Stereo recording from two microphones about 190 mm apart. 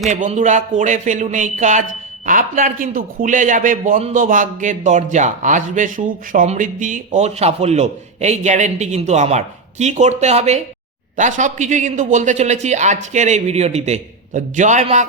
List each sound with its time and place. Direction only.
0.1 s speech: 40° right (ahead or behind)